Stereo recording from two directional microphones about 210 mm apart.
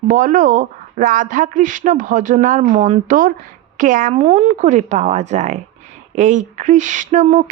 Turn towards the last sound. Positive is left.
turn(degrees=-35)  # may be behind; listen again after turning